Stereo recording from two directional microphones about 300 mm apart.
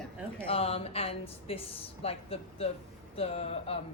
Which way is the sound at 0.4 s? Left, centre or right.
Centre.